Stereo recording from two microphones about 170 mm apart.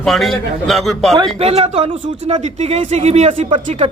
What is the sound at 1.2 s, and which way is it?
Speech, 35° right (ahead or behind).